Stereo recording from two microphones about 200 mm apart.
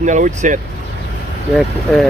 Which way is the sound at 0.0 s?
40° right (ahead or behind).